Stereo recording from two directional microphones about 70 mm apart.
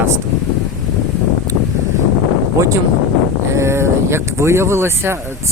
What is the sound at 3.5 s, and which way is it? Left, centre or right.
Speech, right.